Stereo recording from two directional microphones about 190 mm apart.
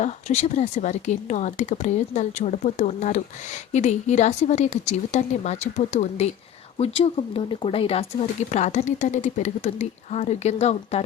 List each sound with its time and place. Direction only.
0.0 s speech: 35° left (ahead or behind)